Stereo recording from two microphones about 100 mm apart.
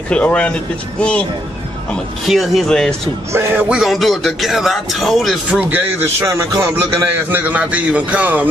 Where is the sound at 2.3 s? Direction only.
Centre (ahead or behind).